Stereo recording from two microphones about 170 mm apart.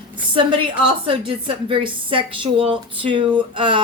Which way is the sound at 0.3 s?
30° right (ahead or behind).